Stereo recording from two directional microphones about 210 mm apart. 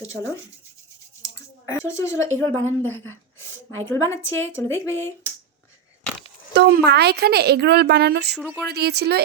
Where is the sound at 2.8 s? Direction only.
70° right (ahead or behind).